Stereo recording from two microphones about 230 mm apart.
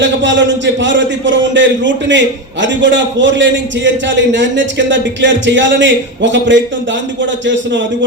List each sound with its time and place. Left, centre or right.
0.0 s a man's voice: right